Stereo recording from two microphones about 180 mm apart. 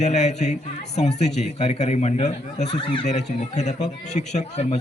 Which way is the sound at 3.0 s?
40° left (ahead or behind).